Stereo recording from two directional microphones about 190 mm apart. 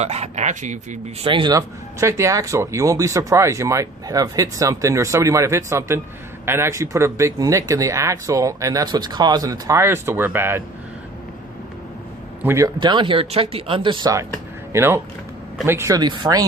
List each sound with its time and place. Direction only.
0.0 s speech: 35° right (ahead or behind)
1.3 s speech: 25° right (ahead or behind)
12.4 s speech: 15° right (ahead or behind)